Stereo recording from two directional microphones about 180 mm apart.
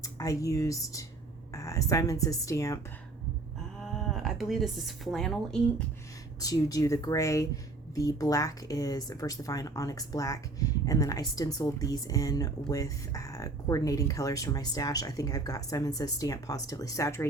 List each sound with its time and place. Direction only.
0.0 s speech: 20° left (ahead or behind)
3.8 s a woman's voice: centre (ahead or behind)
6.4 s speech: 20° left (ahead or behind)